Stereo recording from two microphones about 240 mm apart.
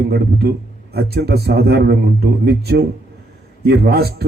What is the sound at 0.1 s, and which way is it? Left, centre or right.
A man's voice, right.